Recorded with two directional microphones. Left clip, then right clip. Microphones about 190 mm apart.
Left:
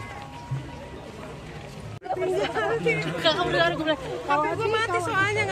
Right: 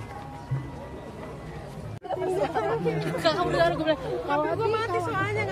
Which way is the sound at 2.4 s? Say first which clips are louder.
Left 1 dB; 10° right (ahead or behind).